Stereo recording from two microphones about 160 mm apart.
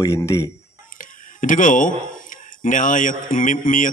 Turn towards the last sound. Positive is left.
turn(degrees=55)  # may be behind; listen again after turning